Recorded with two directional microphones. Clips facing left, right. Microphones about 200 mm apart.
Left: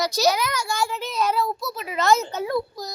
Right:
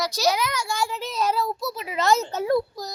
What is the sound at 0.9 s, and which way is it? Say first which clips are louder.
Child singing: left 1 dB; 35° right (ahead or behind).